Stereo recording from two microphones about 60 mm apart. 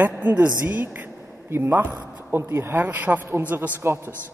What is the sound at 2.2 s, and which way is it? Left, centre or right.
Speech, right.